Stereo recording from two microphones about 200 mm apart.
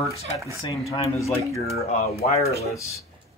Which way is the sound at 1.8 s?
30° left (ahead or behind).